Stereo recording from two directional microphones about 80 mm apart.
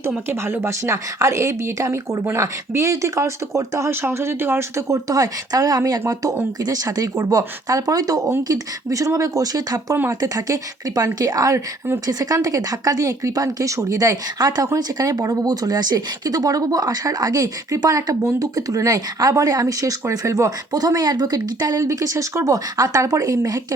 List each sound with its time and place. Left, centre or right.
0.3 s a woman's voice: right
4.9 s speech: right